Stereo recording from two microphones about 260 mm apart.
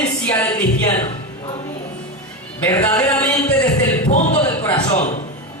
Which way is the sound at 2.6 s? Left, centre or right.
Centre.